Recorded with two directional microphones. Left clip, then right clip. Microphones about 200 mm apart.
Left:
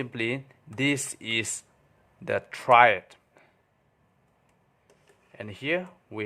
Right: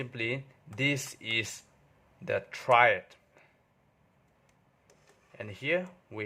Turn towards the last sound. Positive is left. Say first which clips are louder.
# left 2 dB
turn(degrees=15)  # may be behind; listen again after turning